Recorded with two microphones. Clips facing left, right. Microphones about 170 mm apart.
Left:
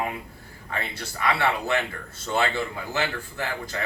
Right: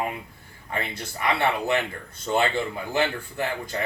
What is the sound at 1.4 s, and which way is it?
Speech, 20° right (ahead or behind).